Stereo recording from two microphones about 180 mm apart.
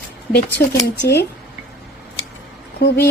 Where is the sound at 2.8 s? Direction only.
70° left (ahead or behind).